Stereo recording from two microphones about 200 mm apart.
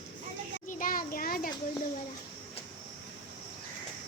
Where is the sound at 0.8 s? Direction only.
45° left (ahead or behind).